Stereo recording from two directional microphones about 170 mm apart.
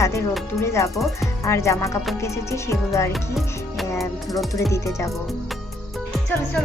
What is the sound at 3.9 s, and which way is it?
Music, 15° left (ahead or behind).